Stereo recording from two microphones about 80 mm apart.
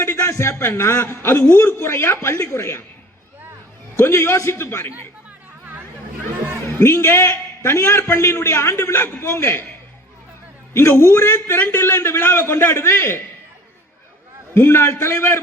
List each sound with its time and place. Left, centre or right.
0.0 s a man's voice: left
3.9 s a man's voice: left
6.7 s a man's voice: left
10.8 s a man's voice: left
14.5 s a man's voice: left